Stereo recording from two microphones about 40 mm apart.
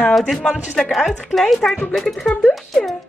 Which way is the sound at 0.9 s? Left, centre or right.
Centre.